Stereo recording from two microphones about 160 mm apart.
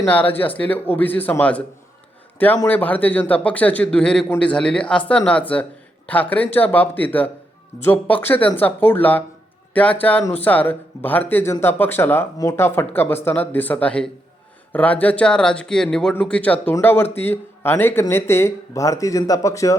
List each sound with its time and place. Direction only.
0.0 s speech: 10° left (ahead or behind)
2.6 s speech: 10° left (ahead or behind)